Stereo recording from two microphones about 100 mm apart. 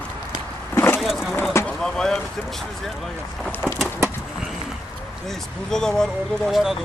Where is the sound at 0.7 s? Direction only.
20° left (ahead or behind).